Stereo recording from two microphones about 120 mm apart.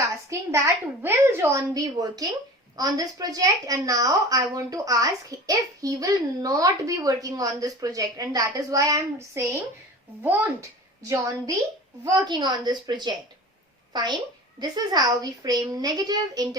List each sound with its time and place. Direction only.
0.3 s a woman's voice: 25° right (ahead or behind)